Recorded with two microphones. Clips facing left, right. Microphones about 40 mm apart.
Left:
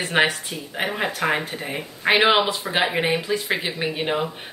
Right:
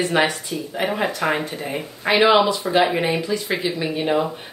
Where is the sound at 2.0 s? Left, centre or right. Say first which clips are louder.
Right 2 dB; left.